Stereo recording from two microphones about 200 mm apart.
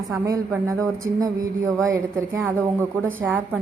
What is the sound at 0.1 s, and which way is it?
A woman's voice, 15° right (ahead or behind).